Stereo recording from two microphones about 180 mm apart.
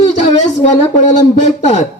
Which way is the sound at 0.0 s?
40° left (ahead or behind).